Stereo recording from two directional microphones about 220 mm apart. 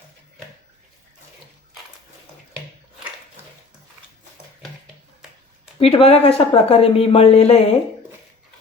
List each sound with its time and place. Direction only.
5.8 s speech: 25° left (ahead or behind)